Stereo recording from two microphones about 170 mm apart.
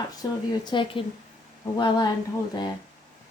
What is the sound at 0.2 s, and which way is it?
Speech, 25° left (ahead or behind).